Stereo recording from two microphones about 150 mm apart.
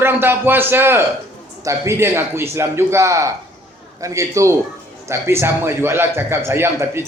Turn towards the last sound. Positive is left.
turn(degrees=-15)  # may be behind; listen again after turning